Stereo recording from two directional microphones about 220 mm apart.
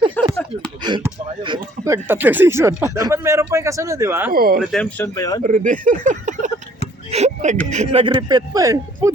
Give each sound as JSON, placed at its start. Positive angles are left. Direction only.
{"t": 0.2, "sound": "a sound", "side_deg": 5}
{"t": 0.8, "sound": "speech", "side_deg": -20}
{"t": 4.3, "sound": "speech", "side_deg": -40}
{"t": 4.7, "sound": "speech", "side_deg": 5}
{"t": 5.4, "sound": "speech", "side_deg": -35}